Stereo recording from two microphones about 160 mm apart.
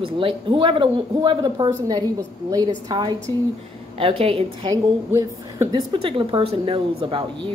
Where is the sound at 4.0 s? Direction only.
35° right (ahead or behind).